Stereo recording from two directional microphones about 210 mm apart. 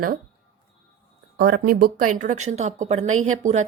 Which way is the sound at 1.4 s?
50° right (ahead or behind).